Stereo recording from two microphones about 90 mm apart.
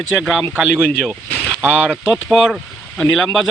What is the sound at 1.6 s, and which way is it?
Speech, 15° right (ahead or behind).